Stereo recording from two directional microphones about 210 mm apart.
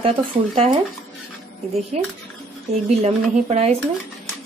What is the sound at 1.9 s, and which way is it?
Speech, 30° right (ahead or behind).